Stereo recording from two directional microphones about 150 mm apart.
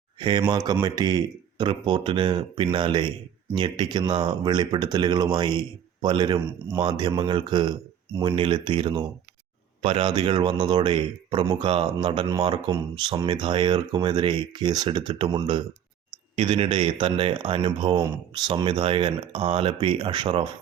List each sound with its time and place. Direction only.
0.2 s speech: 30° right (ahead or behind)